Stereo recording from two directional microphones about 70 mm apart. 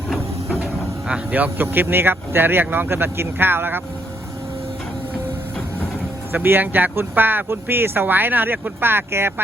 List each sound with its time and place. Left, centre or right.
0.6 s insect: centre
1.6 s speech: right
6.3 s speech: right